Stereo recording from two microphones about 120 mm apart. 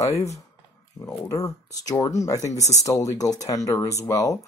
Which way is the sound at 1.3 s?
30° left (ahead or behind).